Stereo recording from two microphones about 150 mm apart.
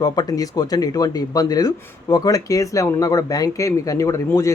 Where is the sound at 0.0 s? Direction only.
25° left (ahead or behind).